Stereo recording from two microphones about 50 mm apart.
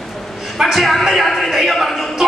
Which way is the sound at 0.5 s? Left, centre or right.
Centre.